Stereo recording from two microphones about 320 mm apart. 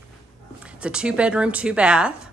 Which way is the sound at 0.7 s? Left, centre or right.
Centre.